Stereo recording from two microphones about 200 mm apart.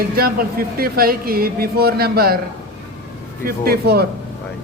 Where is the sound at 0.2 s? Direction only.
50° right (ahead or behind).